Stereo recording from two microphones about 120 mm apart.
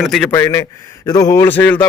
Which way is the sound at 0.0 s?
Centre (ahead or behind).